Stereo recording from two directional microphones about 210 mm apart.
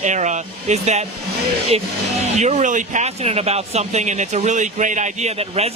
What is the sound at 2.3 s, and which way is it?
Speech, 35° right (ahead or behind).